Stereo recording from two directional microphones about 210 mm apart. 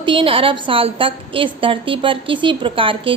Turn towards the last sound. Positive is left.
turn(degrees=-25)  # may be behind; listen again after turning